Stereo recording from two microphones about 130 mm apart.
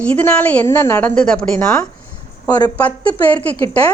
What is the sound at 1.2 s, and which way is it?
Speech, 5° left (ahead or behind).